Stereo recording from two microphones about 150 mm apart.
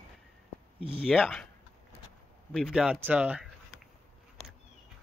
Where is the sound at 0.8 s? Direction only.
40° right (ahead or behind).